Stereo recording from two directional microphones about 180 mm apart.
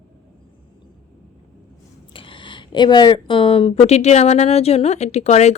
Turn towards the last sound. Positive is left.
turn(degrees=40)  # may be behind; listen again after turning